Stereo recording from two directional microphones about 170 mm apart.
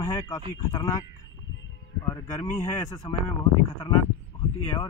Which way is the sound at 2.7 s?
20° left (ahead or behind).